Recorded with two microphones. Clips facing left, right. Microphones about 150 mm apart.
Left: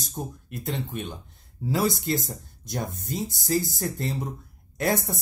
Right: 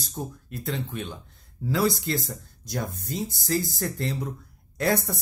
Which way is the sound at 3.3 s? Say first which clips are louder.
Left 2 dB; 45° left (ahead or behind).